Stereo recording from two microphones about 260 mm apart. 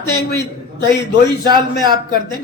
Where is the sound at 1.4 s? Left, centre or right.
Centre.